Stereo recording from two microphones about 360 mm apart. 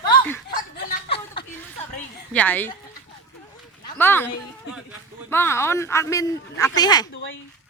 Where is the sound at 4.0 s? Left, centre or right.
Centre.